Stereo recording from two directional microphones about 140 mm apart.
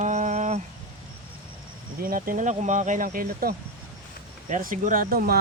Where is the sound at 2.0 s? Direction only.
90° right.